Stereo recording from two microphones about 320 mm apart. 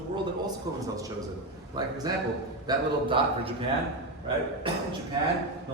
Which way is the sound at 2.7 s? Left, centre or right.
Centre.